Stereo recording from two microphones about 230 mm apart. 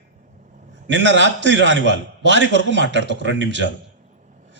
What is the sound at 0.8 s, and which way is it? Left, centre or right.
A man's voice, right.